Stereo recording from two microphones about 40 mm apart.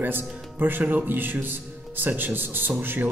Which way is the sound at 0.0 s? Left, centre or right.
Right.